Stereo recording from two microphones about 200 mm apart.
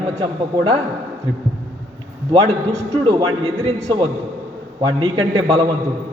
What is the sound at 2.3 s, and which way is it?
A man's voice, 25° right (ahead or behind).